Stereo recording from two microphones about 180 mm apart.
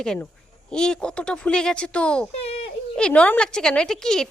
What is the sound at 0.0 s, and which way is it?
A woman's voice, 5° left (ahead or behind).